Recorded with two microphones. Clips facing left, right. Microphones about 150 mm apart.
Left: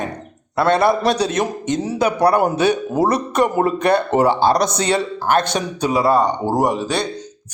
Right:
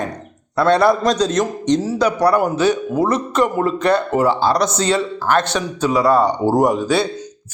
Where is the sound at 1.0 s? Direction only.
65° left (ahead or behind).